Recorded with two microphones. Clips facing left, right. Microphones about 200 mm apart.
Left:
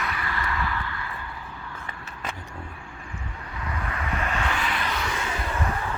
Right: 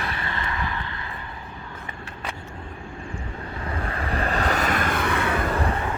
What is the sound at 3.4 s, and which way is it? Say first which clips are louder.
Vehicle: right 2 dB; 30° right (ahead or behind).